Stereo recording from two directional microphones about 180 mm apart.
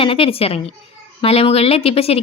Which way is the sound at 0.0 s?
30° left (ahead or behind).